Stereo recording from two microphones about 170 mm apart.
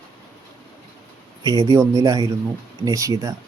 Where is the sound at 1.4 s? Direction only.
25° right (ahead or behind).